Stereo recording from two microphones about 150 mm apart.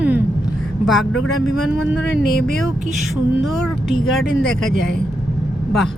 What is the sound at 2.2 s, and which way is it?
Speech, 90° left.